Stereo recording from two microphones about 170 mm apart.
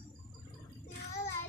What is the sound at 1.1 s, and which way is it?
Child singing, 15° left (ahead or behind).